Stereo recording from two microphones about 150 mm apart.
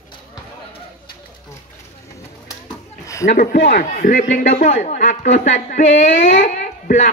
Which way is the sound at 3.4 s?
70° left (ahead or behind).